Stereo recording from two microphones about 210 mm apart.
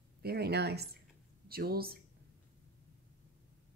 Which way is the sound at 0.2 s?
50° right (ahead or behind).